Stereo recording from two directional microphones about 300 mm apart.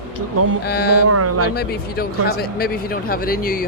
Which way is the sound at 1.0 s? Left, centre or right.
Right.